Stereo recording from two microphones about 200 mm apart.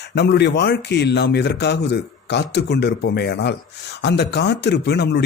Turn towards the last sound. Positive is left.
turn(degrees=55)  # may be behind; listen again after turning